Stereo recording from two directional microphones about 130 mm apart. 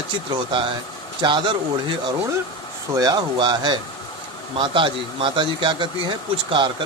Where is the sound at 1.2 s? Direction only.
35° right (ahead or behind).